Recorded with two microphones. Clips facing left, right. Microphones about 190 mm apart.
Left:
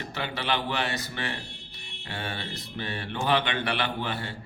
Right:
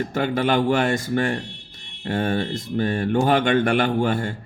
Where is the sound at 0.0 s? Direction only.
50° right (ahead or behind).